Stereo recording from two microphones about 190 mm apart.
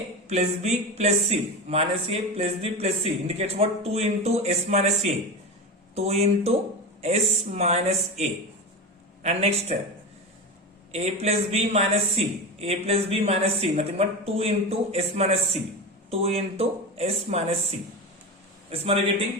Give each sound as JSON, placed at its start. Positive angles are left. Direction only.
{"t": 0.3, "sound": "speech", "side_deg": -35}
{"t": 9.2, "sound": "speech", "side_deg": -35}
{"t": 10.9, "sound": "speech", "side_deg": -35}